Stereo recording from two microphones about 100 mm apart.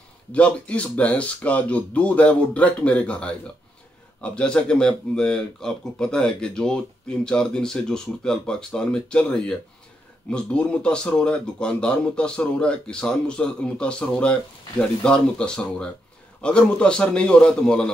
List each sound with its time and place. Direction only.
0.3 s speech: 15° left (ahead or behind)